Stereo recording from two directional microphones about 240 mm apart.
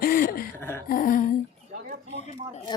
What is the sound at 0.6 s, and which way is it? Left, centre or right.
Speech, centre.